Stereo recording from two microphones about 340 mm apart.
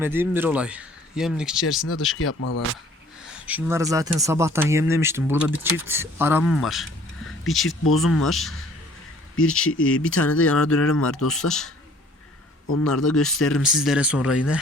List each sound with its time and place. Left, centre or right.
0.0 s speech: centre
2.1 s speech: left
3.2 s speech: centre
7.3 s a sound: centre
7.9 s speech: centre
9.3 s speech: left
10.2 s speech: centre
10.6 s speech: left
11.3 s speech: centre
12.8 s speech: centre